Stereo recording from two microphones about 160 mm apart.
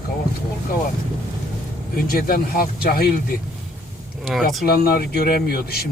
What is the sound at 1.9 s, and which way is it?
Speech, 70° left (ahead or behind).